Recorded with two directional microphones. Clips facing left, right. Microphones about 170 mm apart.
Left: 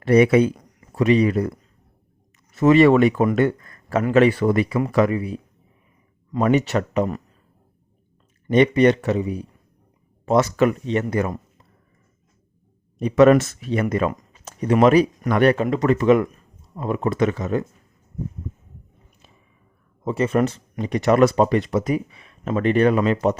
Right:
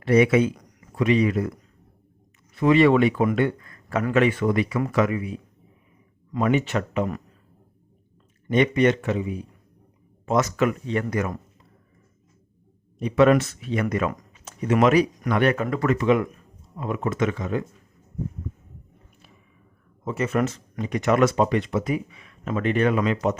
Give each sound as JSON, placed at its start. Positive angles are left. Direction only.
{"t": 0.0, "sound": "speech", "side_deg": 40}
{"t": 2.6, "sound": "speech", "side_deg": 45}
{"t": 8.4, "sound": "speech", "side_deg": 35}
{"t": 13.0, "sound": "speech", "side_deg": 45}
{"t": 15.5, "sound": "speech", "side_deg": 20}
{"t": 16.0, "sound": "speech", "side_deg": 45}
{"t": 20.1, "sound": "speech", "side_deg": 30}